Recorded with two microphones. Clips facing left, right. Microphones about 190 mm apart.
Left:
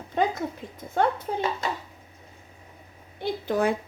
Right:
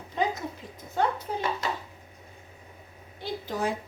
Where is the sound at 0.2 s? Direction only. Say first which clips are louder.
Left 3 dB; 60° left (ahead or behind).